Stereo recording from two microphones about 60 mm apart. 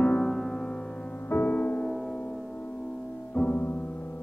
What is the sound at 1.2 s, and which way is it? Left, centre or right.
Music, left.